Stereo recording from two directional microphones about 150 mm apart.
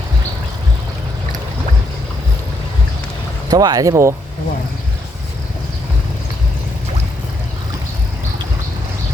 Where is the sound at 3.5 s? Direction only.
25° right (ahead or behind).